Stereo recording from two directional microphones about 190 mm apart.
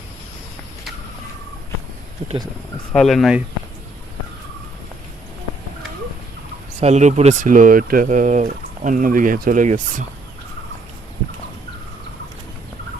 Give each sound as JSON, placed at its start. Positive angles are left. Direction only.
{"t": 2.2, "sound": "speech", "side_deg": -30}
{"t": 2.9, "sound": "speech", "side_deg": 0}
{"t": 6.7, "sound": "speech", "side_deg": -35}